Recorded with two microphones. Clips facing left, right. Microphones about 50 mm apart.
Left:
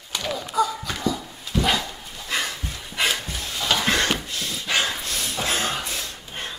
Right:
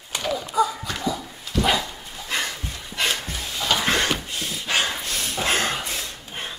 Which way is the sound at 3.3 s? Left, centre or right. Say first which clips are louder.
Even; centre.